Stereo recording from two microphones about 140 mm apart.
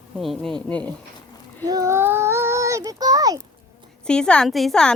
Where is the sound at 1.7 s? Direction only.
20° right (ahead or behind).